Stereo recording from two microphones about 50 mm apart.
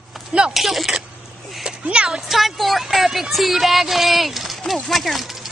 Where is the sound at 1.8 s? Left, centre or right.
Centre.